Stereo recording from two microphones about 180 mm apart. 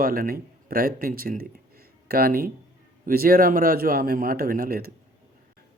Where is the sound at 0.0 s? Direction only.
55° right (ahead or behind).